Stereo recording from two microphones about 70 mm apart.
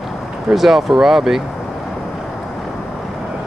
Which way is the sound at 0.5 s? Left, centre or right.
Centre.